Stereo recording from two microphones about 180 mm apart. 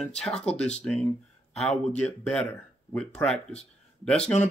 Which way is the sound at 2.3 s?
5° left (ahead or behind).